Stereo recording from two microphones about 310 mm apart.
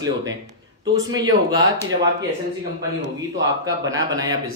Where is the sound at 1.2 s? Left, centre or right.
Centre.